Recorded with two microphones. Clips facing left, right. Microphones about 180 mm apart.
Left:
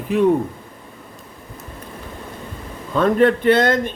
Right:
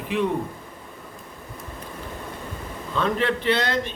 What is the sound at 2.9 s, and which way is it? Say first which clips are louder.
Speech: left 9 dB; 50° left (ahead or behind).